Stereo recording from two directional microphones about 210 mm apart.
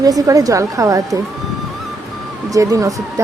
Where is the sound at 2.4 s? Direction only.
15° right (ahead or behind).